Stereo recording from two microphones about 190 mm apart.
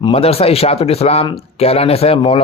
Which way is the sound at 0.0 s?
30° left (ahead or behind).